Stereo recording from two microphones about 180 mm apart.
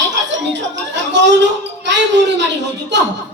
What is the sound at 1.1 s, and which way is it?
Speech, 75° right (ahead or behind).